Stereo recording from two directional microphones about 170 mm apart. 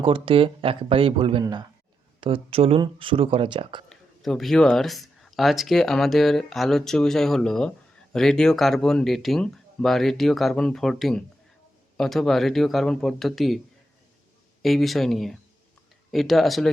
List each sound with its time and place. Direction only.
0.0 s speech: 30° right (ahead or behind)
3.8 s speech: centre (ahead or behind)
14.6 s speech: centre (ahead or behind)